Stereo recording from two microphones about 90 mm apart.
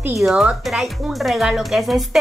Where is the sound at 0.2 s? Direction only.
5° right (ahead or behind).